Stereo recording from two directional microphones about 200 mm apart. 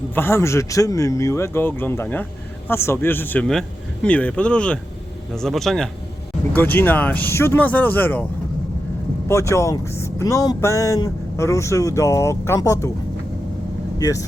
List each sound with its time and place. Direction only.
0.1 s speech: 10° left (ahead or behind)
9.3 s speech: 15° left (ahead or behind)
14.0 s speech: 15° left (ahead or behind)